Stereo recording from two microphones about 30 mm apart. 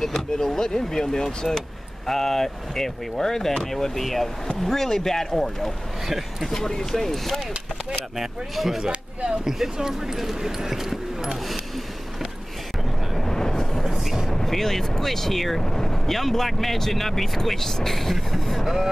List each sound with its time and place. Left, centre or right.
0.1 s speech: centre
2.0 s speech: centre
6.0 s speech: centre
6.5 s speech: centre
8.2 s speech: centre
13.2 s vehicle: centre
13.8 s a sound: centre
14.3 s speech: centre
15.6 s speech: centre
16.1 s speech: centre